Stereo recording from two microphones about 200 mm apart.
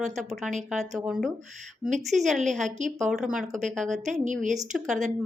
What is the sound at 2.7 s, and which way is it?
Speech, 35° right (ahead or behind).